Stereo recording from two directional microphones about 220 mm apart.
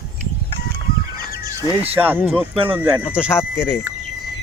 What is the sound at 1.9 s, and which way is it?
Speech, 10° right (ahead or behind).